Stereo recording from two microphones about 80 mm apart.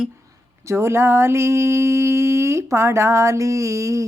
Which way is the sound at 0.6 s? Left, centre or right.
Right.